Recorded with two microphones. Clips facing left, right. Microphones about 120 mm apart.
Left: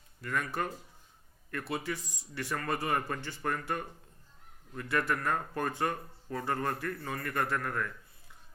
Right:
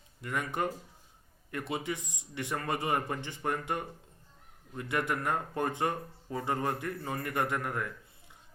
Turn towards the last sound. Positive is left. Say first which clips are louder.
# even
turn(degrees=-15)  # may be behind; listen again after turning